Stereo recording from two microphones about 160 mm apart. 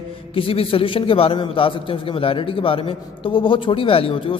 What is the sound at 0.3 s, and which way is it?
A man's voice, 35° left (ahead or behind).